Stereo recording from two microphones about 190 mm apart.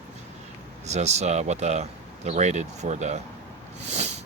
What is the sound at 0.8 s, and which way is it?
Speech, 35° right (ahead or behind).